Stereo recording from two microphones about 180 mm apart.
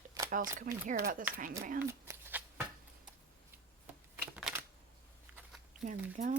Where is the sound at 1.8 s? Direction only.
15° right (ahead or behind).